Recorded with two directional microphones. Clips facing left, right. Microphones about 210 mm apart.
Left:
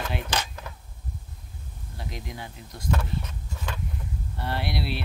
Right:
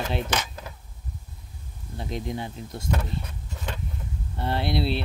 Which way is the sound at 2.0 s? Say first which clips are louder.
Right 7 dB; 25° right (ahead or behind).